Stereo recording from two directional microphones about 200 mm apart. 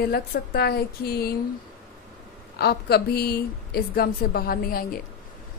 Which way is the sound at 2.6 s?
50° left (ahead or behind).